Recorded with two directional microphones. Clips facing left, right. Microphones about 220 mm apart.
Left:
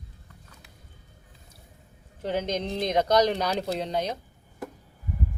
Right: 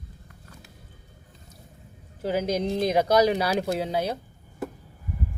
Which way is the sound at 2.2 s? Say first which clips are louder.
Right 3 dB; 5° right (ahead or behind).